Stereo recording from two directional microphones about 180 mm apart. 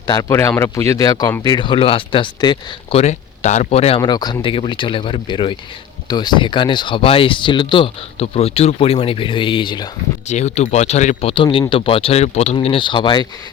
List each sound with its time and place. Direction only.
0.1 s speech: 15° left (ahead or behind)
3.0 s speech: 40° left (ahead or behind)
10.2 s speech: 40° left (ahead or behind)